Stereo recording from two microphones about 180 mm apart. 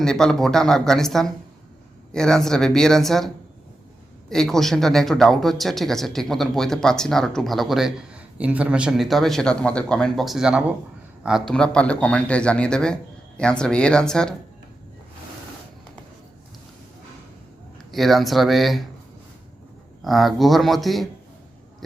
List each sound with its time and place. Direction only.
0.0 s speech: 5° left (ahead or behind)
4.3 s speech: 5° left (ahead or behind)
17.9 s speech: centre (ahead or behind)
20.0 s speech: centre (ahead or behind)